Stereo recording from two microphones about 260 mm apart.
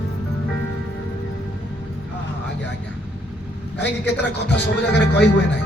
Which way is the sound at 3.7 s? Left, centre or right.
Left.